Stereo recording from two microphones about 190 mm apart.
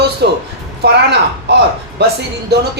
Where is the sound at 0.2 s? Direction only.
60° right (ahead or behind).